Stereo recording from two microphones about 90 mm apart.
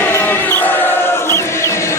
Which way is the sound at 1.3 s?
30° left (ahead or behind).